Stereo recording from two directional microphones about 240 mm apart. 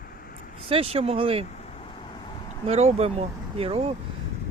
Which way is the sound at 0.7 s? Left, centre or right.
Right.